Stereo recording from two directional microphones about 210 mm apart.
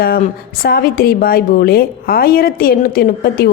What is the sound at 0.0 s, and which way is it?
A woman's voice, 45° left (ahead or behind).